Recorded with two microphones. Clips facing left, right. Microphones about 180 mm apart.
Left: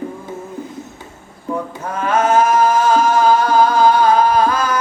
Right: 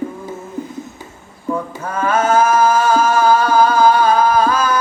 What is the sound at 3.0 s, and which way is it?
Music, 15° left (ahead or behind).